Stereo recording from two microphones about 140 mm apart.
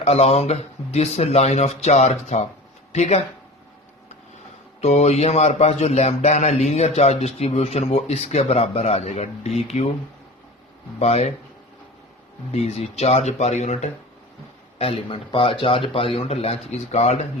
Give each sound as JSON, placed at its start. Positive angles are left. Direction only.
{"t": 0.0, "sound": "speech", "side_deg": 50}
{"t": 4.8, "sound": "speech", "side_deg": 50}
{"t": 11.0, "sound": "speech", "side_deg": 50}
{"t": 12.5, "sound": "speech", "side_deg": 50}
{"t": 14.8, "sound": "speech", "side_deg": 40}